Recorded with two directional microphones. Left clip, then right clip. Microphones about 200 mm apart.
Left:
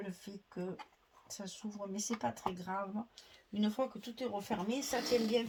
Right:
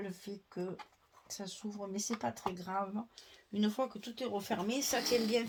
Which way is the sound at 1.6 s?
35° right (ahead or behind).